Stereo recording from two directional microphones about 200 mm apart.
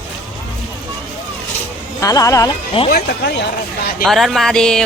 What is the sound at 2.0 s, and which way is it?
Speech, 15° left (ahead or behind).